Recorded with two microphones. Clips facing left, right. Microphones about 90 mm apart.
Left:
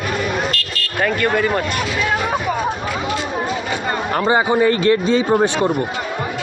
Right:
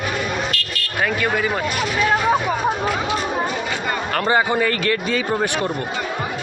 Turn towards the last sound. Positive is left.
turn(degrees=20)  # may be behind; listen again after turning